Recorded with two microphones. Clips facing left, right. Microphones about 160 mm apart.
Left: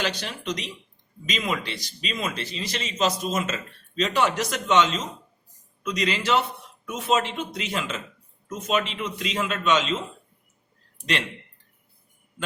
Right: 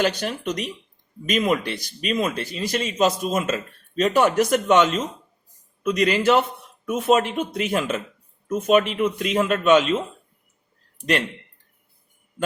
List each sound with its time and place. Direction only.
0.0 s speech: 50° right (ahead or behind)